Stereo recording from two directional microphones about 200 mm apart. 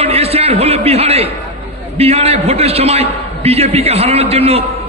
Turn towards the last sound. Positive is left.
turn(degrees=-30)  # may be behind; listen again after turning